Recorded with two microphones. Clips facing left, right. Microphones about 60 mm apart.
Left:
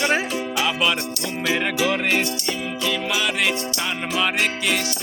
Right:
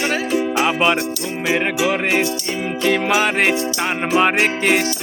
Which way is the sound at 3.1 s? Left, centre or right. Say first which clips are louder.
Right 6 dB; right.